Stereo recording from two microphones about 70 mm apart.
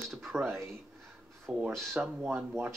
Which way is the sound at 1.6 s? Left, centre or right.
Centre.